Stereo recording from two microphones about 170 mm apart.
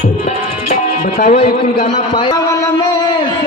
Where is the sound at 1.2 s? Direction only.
40° left (ahead or behind).